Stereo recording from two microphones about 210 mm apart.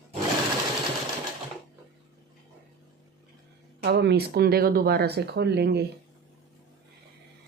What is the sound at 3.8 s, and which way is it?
Speech, 55° right (ahead or behind).